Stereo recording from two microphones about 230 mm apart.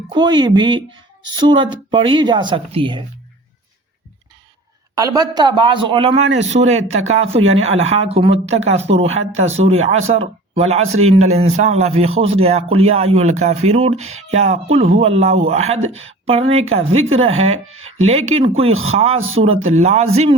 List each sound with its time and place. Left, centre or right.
0.1 s speech: centre
4.9 s a man's voice: centre
17.7 s speech: right
17.9 s speech: right
18.7 s speech: right
18.9 s speech: right